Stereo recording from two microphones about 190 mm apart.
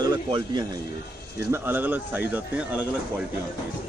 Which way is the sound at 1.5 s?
10° right (ahead or behind).